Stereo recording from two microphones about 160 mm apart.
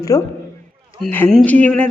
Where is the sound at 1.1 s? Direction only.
10° left (ahead or behind).